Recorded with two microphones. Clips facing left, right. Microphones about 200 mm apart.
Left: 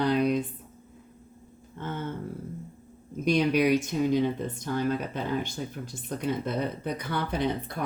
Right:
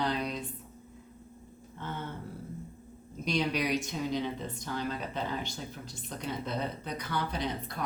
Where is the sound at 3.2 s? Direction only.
55° left (ahead or behind).